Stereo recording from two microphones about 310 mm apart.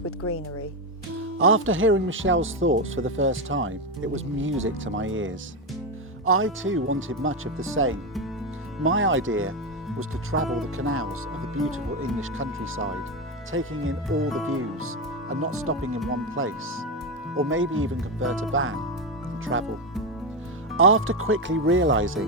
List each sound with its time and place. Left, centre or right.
0.0 s music: left
1.4 s speech: right
10.4 s speech: centre
10.8 s speech: right
20.7 s speech: right